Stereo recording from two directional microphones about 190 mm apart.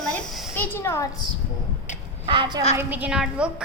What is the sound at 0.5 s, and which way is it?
Speech, 10° left (ahead or behind).